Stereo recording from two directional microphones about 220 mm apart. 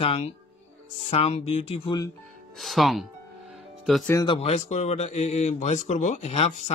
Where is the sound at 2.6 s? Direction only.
Centre (ahead or behind).